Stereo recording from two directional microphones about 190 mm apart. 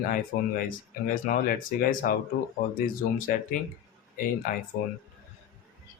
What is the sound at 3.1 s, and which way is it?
Speech, 45° left (ahead or behind).